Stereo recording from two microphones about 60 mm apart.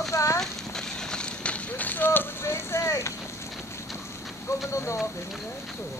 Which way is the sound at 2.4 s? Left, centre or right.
Left.